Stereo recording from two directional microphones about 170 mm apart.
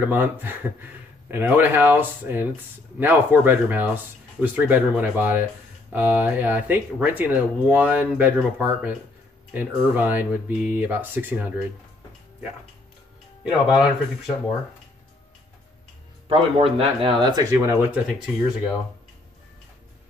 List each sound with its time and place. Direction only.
0.0 s speech: 10° right (ahead or behind)
13.4 s speech: 5° right (ahead or behind)
16.3 s speech: 35° right (ahead or behind); by 18.3 s 5° right (ahead or behind)